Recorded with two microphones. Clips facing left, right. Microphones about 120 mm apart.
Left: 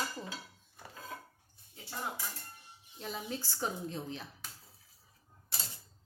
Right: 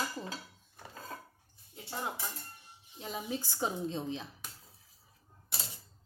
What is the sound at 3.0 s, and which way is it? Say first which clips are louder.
Dishes: right 2 dB; 15° right (ahead or behind).